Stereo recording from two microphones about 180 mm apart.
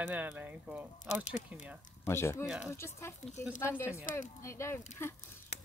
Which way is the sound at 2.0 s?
15° left (ahead or behind).